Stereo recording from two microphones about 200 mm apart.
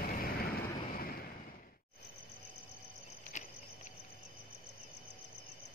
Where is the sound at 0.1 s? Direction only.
45° left (ahead or behind).